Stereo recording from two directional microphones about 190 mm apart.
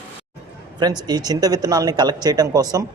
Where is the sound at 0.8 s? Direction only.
20° right (ahead or behind).